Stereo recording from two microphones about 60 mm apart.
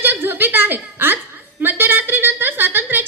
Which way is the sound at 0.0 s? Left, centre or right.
Right.